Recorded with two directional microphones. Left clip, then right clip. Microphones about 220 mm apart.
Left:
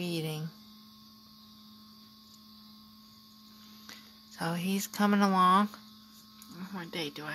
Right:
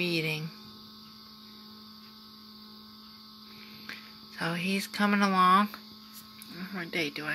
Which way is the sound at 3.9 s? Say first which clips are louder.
Right 7 dB; 20° left (ahead or behind).